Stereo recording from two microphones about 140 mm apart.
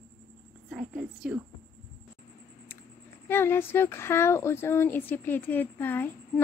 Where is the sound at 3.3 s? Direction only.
15° left (ahead or behind).